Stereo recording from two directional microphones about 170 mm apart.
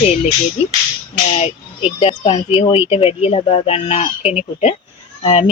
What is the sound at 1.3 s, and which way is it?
Speech, 35° left (ahead or behind).